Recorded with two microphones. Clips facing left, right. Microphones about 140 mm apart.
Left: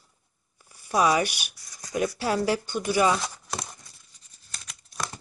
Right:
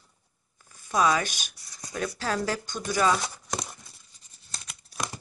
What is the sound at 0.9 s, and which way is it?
Speech, 15° left (ahead or behind).